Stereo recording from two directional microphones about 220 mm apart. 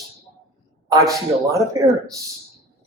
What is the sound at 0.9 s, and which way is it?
Speech, 15° right (ahead or behind).